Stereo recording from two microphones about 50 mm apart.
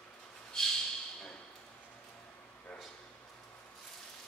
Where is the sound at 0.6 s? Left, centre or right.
Centre.